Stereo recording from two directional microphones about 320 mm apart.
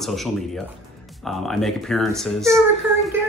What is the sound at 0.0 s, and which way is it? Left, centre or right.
Speech, centre.